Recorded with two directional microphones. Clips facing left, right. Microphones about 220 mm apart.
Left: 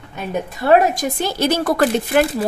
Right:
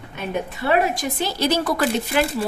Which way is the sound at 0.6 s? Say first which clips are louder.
Left 6 dB; 45° left (ahead or behind).